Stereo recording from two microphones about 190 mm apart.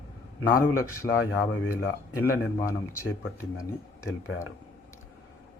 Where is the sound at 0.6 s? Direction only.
15° left (ahead or behind).